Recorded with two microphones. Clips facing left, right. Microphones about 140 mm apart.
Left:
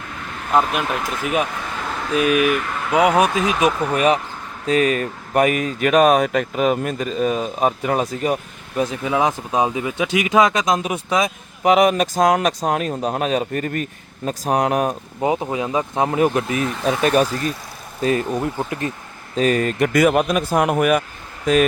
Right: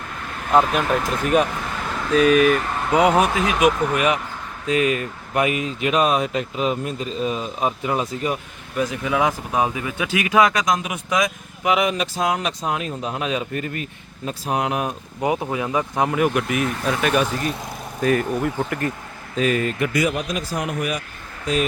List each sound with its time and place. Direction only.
0.5 s speech: 5° left (ahead or behind)
3.2 s speech: 25° left (ahead or behind); by 8.4 s 40° left (ahead or behind)
8.8 s speech: 25° left (ahead or behind)
15.2 s speech: 20° left (ahead or behind)
18.0 s speech: 25° left (ahead or behind)
19.4 s speech: 40° left (ahead or behind)